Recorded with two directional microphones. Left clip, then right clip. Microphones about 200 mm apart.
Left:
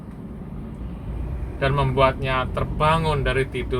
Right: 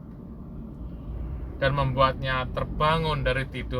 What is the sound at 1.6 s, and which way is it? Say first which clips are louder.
Speech: left 3 dB; 30° right (ahead or behind).